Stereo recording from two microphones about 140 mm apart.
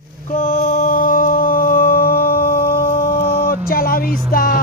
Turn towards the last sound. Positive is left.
turn(degrees=90)